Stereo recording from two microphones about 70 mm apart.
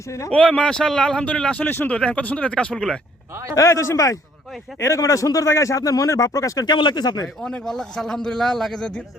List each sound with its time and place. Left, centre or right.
0.3 s speech: centre
3.5 s a man's voice: left
6.7 s speech: left
7.4 s speech: centre